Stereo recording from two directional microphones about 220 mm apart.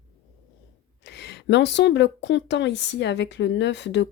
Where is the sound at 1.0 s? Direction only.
50° left (ahead or behind).